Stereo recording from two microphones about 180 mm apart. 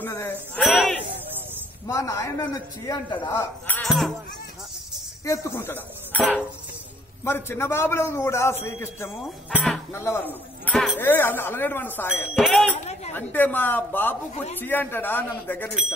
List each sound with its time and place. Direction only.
0.0 s speech: 15° left (ahead or behind)
0.6 s a sound: centre (ahead or behind)
1.9 s a man's voice: 20° left (ahead or behind)
5.2 s a man's voice: 15° left (ahead or behind)
7.2 s a man's voice: 15° left (ahead or behind)
12.4 s a man's voice: centre (ahead or behind)